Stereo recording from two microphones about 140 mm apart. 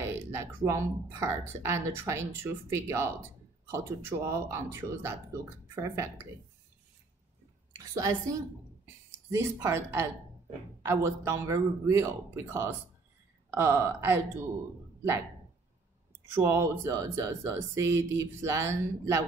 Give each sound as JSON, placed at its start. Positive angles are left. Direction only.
{"t": 0.3, "sound": "speech", "side_deg": -20}
{"t": 7.7, "sound": "a woman's voice", "side_deg": -20}
{"t": 16.3, "sound": "speech", "side_deg": -20}